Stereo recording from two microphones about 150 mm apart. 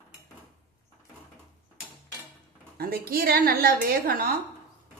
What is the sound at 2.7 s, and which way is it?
A woman's voice, 90° right.